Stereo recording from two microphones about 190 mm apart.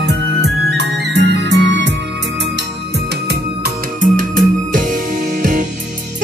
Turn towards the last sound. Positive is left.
turn(degrees=-45)  # may be behind; listen again after turning